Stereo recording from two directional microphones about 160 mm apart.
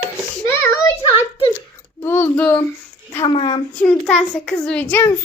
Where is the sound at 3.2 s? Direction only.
35° left (ahead or behind).